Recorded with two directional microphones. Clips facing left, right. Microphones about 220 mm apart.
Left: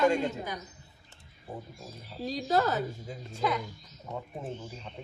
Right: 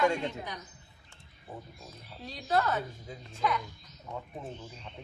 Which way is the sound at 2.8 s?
Centre (ahead or behind).